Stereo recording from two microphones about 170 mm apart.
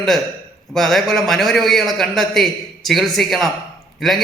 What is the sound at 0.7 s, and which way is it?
A man's voice, centre (ahead or behind).